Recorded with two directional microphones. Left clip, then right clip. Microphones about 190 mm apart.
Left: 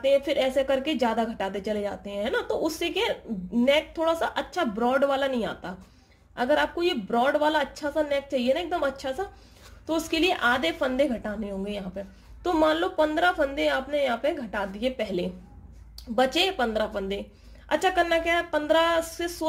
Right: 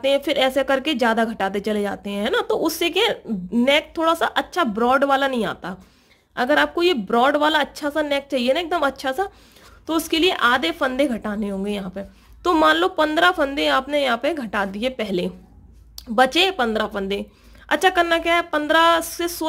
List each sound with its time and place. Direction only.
0.0 s speech: 35° right (ahead or behind)